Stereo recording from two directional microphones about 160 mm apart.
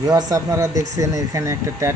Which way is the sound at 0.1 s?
25° right (ahead or behind).